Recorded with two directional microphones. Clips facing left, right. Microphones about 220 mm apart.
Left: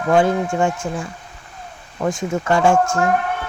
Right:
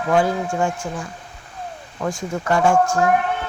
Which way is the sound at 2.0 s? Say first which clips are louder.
Left 4 dB; 25° left (ahead or behind).